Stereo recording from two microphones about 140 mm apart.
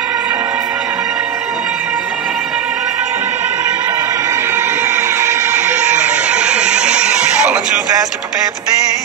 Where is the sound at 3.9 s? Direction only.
20° right (ahead or behind).